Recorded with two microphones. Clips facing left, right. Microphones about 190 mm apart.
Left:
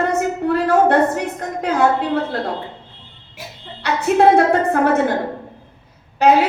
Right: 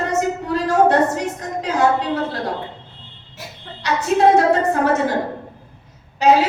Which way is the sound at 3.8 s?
60° left (ahead or behind).